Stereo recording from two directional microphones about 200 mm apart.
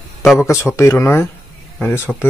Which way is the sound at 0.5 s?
15° left (ahead or behind).